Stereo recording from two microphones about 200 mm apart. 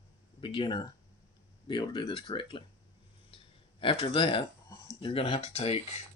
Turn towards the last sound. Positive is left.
turn(degrees=30)  # may be behind; listen again after turning